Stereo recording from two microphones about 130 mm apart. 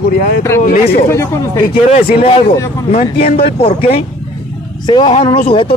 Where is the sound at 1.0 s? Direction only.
20° left (ahead or behind).